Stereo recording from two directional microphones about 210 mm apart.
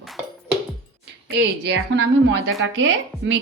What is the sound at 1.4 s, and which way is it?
A woman's voice, 55° right (ahead or behind).